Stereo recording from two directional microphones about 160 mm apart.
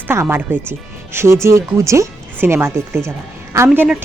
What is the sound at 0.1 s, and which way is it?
Speech, 15° right (ahead or behind).